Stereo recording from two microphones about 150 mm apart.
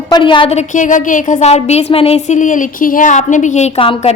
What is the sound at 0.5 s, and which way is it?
Speech, 60° left (ahead or behind).